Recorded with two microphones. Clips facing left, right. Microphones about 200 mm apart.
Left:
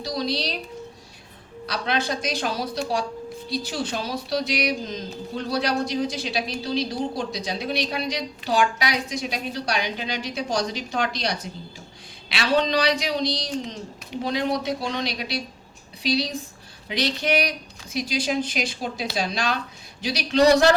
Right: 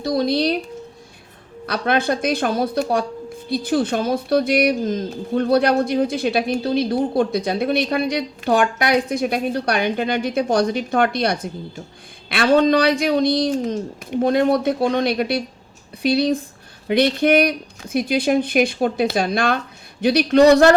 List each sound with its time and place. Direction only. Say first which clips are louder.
0.0 s speech: right 8 dB; 55° right (ahead or behind)
1.6 s speech: right 6 dB; 55° right (ahead or behind)